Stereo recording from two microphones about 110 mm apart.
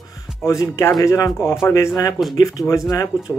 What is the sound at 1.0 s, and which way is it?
Speech, 30° left (ahead or behind).